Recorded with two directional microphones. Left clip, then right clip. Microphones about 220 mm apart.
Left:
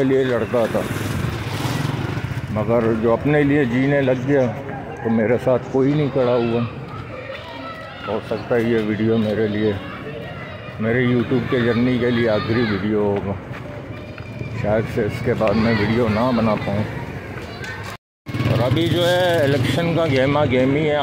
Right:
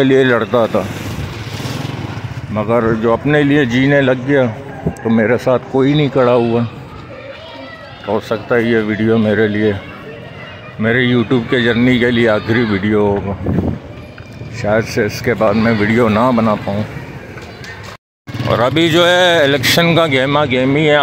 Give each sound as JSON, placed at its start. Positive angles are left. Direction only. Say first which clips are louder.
{"t": 0.0, "sound": "speech", "louder": "right 7 dB", "side_deg": -20}
{"t": 2.5, "sound": "speech", "louder": "right 4 dB", "side_deg": -15}
{"t": 8.5, "sound": "speech", "louder": "right 5 dB", "side_deg": -15}
{"t": 10.8, "sound": "speech", "louder": "right 6 dB", "side_deg": -15}
{"t": 14.6, "sound": "speech", "louder": "right 6 dB", "side_deg": -15}
{"t": 18.6, "sound": "speech", "louder": "right 8 dB", "side_deg": -30}